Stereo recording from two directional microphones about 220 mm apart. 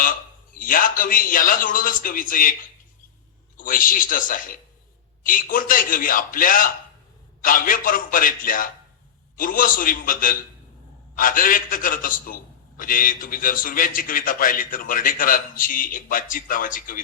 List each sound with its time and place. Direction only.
0.5 s a man's voice: 40° left (ahead or behind)
3.6 s a man's voice: 40° left (ahead or behind)